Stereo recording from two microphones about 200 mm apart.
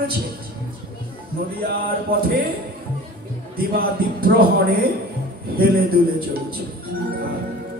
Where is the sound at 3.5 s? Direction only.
50° right (ahead or behind).